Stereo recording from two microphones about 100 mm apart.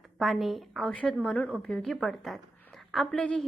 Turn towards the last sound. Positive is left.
turn(degrees=10)  # may be behind; listen again after turning